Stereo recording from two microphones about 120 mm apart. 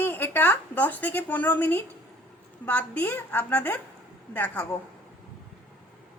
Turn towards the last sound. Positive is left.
turn(degrees=15)  # may be behind; listen again after turning